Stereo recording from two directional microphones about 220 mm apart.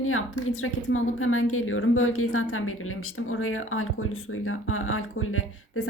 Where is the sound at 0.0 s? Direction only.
65° left (ahead or behind).